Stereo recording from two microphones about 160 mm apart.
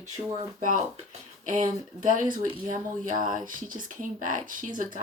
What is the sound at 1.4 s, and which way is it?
Speech, 55° right (ahead or behind).